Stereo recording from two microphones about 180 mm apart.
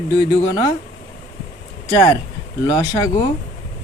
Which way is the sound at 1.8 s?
25° left (ahead or behind).